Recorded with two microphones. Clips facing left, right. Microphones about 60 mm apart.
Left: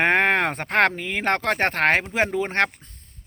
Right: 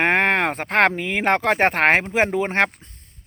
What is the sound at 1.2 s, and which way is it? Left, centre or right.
Speech, centre.